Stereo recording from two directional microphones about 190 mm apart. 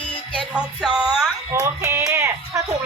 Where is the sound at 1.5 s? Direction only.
15° right (ahead or behind).